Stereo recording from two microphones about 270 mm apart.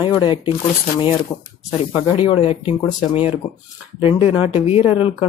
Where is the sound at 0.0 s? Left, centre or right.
Centre.